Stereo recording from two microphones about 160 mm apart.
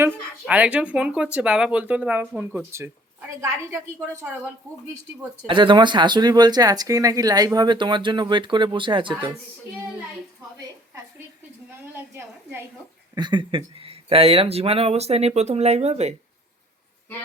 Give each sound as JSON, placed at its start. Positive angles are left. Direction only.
{"t": 0.0, "sound": "speech", "side_deg": -10}
{"t": 5.5, "sound": "speech", "side_deg": -30}
{"t": 11.9, "sound": "a woman's voice", "side_deg": -15}
{"t": 13.1, "sound": "speech", "side_deg": -30}